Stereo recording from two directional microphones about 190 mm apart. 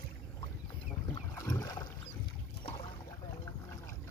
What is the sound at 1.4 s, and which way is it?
Boat, 20° left (ahead or behind).